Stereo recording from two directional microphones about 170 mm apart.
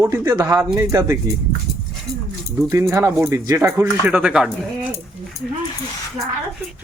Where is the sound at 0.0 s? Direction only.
20° right (ahead or behind).